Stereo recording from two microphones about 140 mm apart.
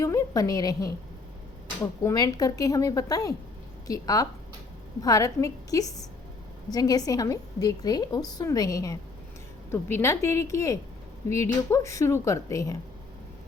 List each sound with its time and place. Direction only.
0.0 s a woman's voice: 25° left (ahead or behind)